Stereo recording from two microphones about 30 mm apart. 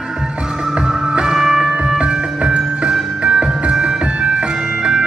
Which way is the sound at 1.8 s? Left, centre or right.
Right.